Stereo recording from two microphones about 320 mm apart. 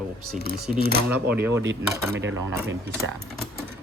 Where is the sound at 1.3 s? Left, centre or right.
Centre.